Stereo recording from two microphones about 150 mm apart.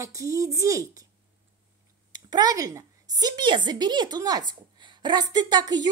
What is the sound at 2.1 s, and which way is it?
A woman's voice, 25° right (ahead or behind).